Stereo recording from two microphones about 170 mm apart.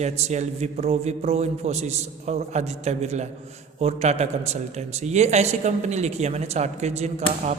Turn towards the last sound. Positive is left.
turn(degrees=-40)  # may be behind; listen again after turning